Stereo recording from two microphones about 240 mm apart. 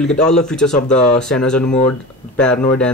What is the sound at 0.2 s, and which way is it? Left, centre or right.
Speech, centre.